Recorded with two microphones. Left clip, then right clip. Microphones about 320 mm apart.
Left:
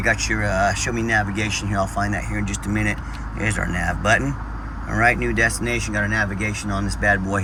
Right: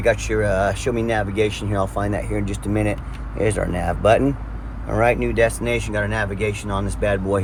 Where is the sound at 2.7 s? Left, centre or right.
Centre.